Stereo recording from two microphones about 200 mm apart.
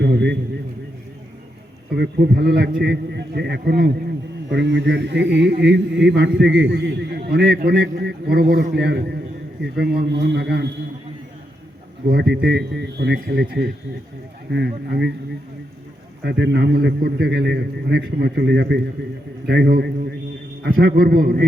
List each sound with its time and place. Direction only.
0.0 s a sound: 60° right (ahead or behind)
2.0 s a man's voice: 55° right (ahead or behind)
12.1 s a man's voice: 55° right (ahead or behind)
16.2 s a man's voice: 55° right (ahead or behind)